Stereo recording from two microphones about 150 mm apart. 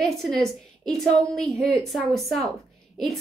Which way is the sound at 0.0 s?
Centre (ahead or behind).